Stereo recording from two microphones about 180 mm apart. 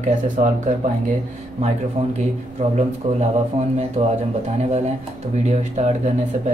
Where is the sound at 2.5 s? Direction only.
40° right (ahead or behind).